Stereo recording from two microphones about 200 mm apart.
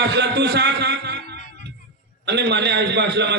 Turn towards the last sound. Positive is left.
turn(degrees=-60)  # may be behind; listen again after turning